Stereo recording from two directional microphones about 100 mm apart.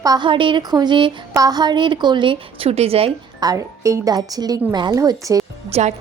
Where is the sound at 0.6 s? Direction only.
40° right (ahead or behind).